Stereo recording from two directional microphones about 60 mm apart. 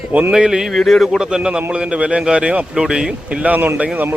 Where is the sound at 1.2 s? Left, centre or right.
Centre.